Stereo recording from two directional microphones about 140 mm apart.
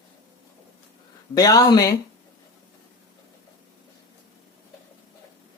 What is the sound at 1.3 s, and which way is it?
Speech, 25° left (ahead or behind).